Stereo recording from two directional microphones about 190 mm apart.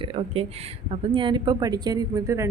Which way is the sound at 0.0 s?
30° right (ahead or behind).